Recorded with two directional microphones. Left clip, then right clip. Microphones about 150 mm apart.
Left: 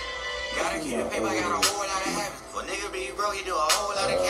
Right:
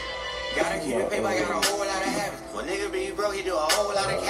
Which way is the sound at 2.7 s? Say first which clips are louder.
Right 4 dB; 20° right (ahead or behind).